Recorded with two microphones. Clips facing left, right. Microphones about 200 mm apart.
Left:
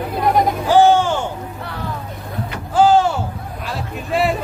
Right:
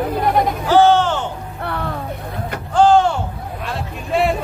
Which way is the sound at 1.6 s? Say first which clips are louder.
Right 8 dB; 60° right (ahead or behind).